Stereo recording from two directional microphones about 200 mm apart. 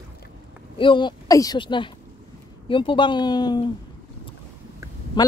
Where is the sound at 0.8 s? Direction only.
25° left (ahead or behind).